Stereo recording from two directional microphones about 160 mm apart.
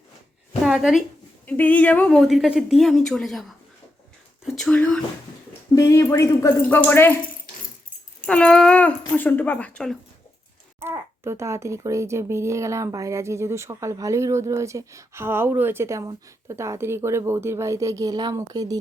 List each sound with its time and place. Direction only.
0.6 s a woman's voice: centre (ahead or behind)
1.5 s speech: 10° left (ahead or behind)
4.5 s speech: 5° left (ahead or behind)
5.7 s speech: 20° left (ahead or behind)
8.3 s speech: 5° left (ahead or behind)
10.8 s speech: 15° right (ahead or behind)